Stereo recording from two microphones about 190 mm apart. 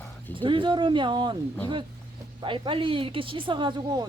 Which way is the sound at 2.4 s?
25° right (ahead or behind).